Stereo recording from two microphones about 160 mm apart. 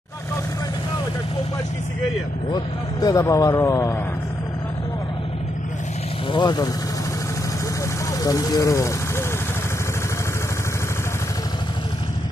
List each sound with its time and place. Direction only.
2.5 s speech: 25° left (ahead or behind)
6.3 s speech: 25° left (ahead or behind)
8.2 s speech: 20° left (ahead or behind)